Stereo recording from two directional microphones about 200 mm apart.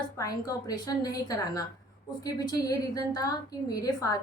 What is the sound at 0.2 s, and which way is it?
A woman's voice, 20° left (ahead or behind).